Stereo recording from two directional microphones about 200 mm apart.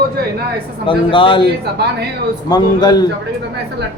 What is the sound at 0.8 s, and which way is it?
Speech, 25° left (ahead or behind).